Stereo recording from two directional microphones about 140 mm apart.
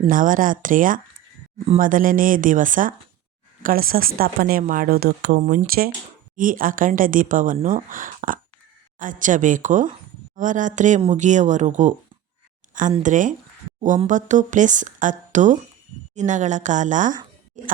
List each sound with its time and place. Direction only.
0.1 s speech: 75° right (ahead or behind)
1.5 s speech: 45° right (ahead or behind)
1.8 s speech: 75° right (ahead or behind)
3.6 s speech: 90° right
6.3 s speech: 75° right (ahead or behind); by 11.9 s 60° right (ahead or behind)
13.0 s speech: 65° right (ahead or behind)